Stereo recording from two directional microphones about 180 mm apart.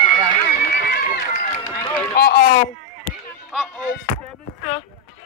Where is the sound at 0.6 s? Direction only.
60° left (ahead or behind).